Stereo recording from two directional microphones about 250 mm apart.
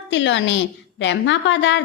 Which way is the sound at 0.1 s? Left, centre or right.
Left.